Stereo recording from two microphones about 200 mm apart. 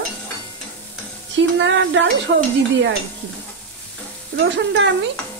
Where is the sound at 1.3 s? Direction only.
65° right (ahead or behind).